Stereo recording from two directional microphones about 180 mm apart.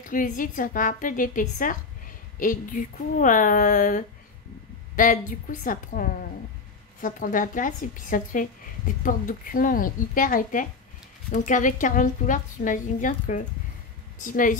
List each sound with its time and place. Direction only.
0.1 s a woman's voice: 50° left (ahead or behind)